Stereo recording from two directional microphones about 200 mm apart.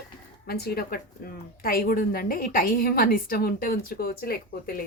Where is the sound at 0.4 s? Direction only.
50° left (ahead or behind).